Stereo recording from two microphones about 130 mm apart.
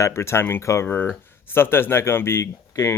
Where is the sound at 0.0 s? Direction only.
20° left (ahead or behind).